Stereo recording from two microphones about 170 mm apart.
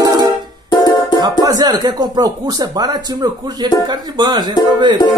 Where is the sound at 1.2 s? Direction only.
25° right (ahead or behind).